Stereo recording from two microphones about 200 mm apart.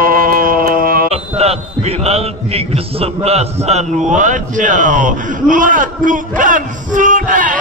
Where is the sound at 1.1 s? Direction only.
30° right (ahead or behind).